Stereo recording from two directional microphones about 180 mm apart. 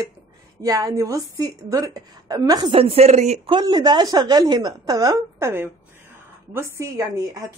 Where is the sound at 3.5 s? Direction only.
25° right (ahead or behind).